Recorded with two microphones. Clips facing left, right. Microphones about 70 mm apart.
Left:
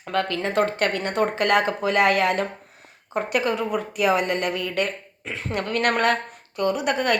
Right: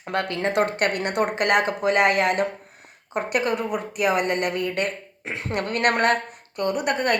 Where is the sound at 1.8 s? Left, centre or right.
Right.